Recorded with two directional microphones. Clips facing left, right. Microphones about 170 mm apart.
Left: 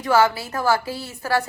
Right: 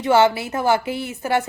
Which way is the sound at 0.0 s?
25° right (ahead or behind).